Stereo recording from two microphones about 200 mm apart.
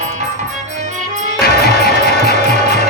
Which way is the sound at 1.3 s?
50° left (ahead or behind).